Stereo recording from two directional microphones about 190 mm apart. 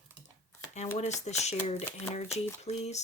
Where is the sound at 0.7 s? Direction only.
35° left (ahead or behind).